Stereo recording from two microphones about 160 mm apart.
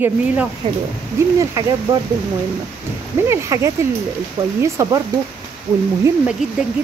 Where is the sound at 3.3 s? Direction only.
15° right (ahead or behind).